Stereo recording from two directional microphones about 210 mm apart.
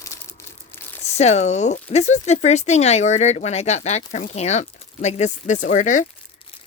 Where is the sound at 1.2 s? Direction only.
35° left (ahead or behind).